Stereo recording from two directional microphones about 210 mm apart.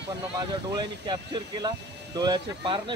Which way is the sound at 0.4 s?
20° right (ahead or behind).